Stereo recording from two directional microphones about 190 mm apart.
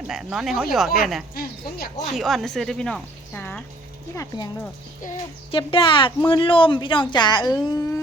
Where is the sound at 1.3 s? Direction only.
50° left (ahead or behind).